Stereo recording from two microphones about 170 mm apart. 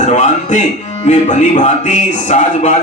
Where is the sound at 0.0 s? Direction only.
45° left (ahead or behind).